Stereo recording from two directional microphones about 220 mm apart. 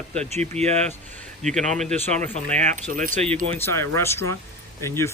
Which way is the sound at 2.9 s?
35° right (ahead or behind).